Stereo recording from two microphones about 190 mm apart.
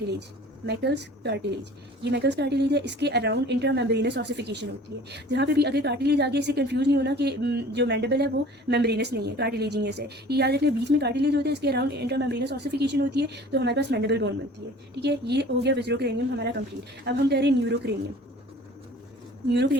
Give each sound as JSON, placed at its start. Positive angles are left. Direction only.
{"t": 0.1, "sound": "a woman's voice", "side_deg": -60}
{"t": 19.5, "sound": "a woman's voice", "side_deg": -65}